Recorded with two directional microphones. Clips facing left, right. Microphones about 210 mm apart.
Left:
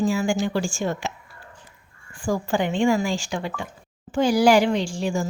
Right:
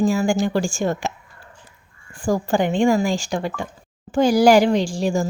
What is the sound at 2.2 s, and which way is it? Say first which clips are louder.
Speech: right 4 dB; 40° right (ahead or behind).